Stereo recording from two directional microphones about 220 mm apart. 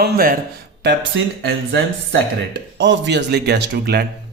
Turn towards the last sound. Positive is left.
turn(degrees=-45)  # may be behind; listen again after turning